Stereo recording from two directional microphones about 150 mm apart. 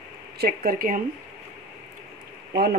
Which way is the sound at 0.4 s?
80° right.